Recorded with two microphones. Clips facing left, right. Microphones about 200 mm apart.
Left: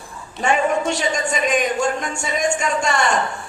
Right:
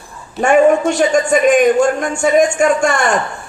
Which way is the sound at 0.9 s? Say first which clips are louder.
Right 9 dB; 50° right (ahead or behind).